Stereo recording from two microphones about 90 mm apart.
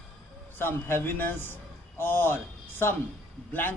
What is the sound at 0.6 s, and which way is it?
A man's voice, 25° left (ahead or behind).